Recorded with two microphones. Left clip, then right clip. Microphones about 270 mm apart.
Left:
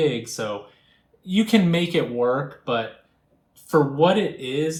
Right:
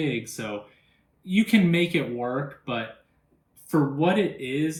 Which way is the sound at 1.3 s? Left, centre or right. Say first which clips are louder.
Left 2 dB; centre.